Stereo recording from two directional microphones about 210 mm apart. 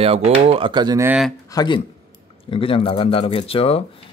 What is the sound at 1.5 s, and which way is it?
Speech, 20° left (ahead or behind).